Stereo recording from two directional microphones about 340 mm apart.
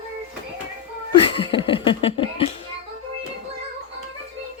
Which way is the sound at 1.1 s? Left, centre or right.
Centre.